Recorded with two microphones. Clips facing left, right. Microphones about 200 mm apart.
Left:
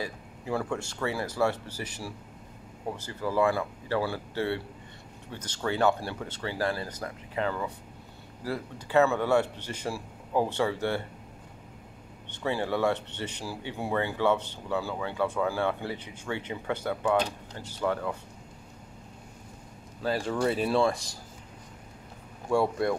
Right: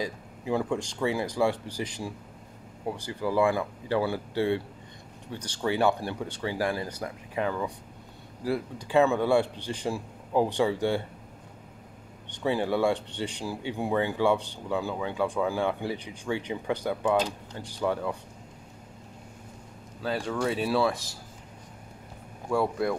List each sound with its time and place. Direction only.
0.0 s speech: 15° right (ahead or behind)
12.3 s speech: 15° right (ahead or behind)
20.0 s speech: centre (ahead or behind)
22.5 s speech: centre (ahead or behind)